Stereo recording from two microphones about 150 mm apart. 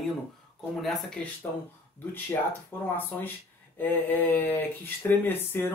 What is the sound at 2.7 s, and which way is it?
Speech, 15° left (ahead or behind).